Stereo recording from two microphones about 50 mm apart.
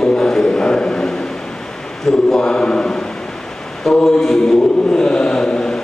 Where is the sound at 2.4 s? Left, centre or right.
Centre.